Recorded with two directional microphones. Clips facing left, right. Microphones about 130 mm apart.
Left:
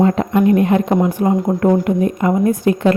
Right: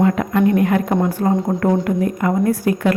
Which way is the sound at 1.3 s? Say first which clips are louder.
Left 2 dB; 5° left (ahead or behind).